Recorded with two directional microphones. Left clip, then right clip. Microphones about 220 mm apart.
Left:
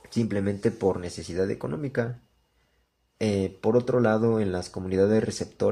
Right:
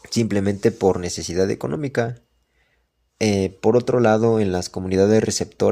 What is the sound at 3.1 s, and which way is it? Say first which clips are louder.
Speech: right 6 dB; 30° right (ahead or behind).